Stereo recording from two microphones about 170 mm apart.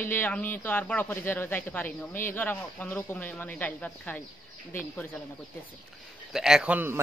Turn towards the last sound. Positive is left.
turn(degrees=-10)  # may be behind; listen again after turning